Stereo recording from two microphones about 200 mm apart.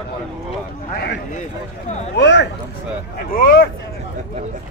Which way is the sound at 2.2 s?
60° left (ahead or behind).